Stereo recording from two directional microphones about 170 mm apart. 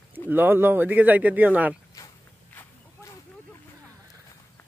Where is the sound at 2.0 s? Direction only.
20° left (ahead or behind).